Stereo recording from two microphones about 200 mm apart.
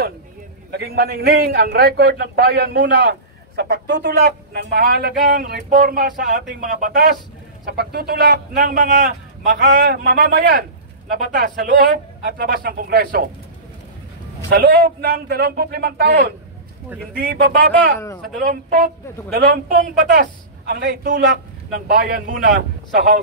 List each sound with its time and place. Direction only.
0.7 s a man's voice: 50° right (ahead or behind)
14.5 s a man's voice: 50° right (ahead or behind)
17.9 s speech: 15° left (ahead or behind)
18.4 s a man's voice: 45° right (ahead or behind)